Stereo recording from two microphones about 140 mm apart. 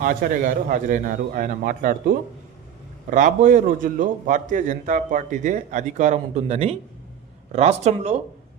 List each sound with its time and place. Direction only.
0.0 s a man's voice: 75° right (ahead or behind)
3.1 s a man's voice: 65° right (ahead or behind); by 8.2 s 50° right (ahead or behind)